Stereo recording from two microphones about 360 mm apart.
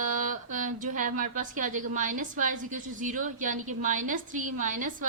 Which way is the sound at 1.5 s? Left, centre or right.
Right.